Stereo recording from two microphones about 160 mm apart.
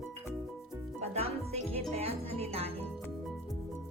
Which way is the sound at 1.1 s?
40° right (ahead or behind).